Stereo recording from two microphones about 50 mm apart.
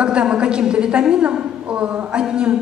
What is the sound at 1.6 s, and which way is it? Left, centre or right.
Speech, right.